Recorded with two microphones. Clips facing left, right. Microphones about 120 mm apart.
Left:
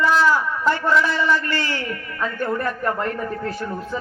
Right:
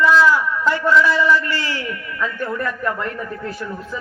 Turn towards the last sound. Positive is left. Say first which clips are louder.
# even
turn(degrees=40)  # may be behind; listen again after turning